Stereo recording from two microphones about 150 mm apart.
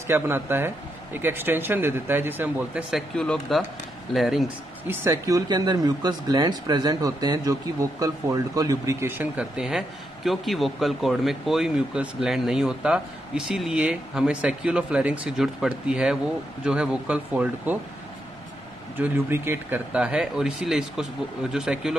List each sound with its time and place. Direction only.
0.0 s speech: 15° right (ahead or behind)
2.9 s speech: 5° left (ahead or behind)
4.8 s speech: 20° right (ahead or behind)
9.2 s speech: 5° right (ahead or behind)
18.9 s speech: 15° right (ahead or behind)